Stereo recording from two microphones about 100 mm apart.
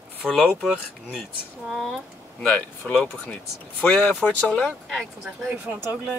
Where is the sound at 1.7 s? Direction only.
5° left (ahead or behind).